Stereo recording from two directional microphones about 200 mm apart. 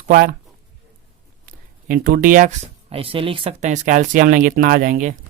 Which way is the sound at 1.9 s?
45° right (ahead or behind).